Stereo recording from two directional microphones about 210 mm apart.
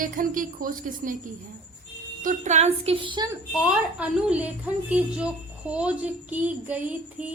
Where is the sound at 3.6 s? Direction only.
5° right (ahead or behind).